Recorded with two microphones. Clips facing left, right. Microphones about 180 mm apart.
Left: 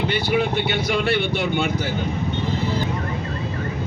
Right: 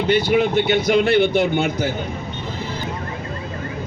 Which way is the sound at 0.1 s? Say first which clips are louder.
Right 8 dB; 45° right (ahead or behind).